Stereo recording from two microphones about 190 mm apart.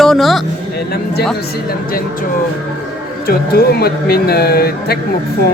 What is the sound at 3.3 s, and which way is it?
Speech, 55° left (ahead or behind).